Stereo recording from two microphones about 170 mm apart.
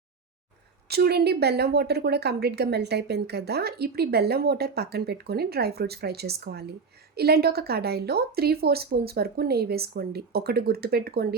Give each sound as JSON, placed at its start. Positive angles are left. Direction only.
{"t": 0.9, "sound": "speech", "side_deg": -70}